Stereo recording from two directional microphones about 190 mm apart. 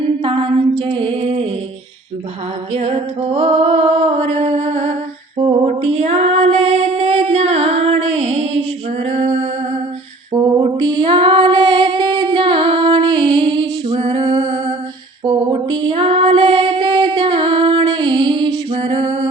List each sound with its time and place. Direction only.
0.2 s music: 30° right (ahead or behind)
2.7 s music: 30° right (ahead or behind)
5.4 s female singing: 30° right (ahead or behind)